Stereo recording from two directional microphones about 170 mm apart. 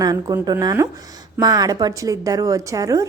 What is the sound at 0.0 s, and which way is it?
A woman's voice, 20° right (ahead or behind).